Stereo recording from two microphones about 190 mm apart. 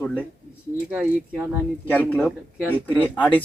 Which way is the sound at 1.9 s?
10° left (ahead or behind).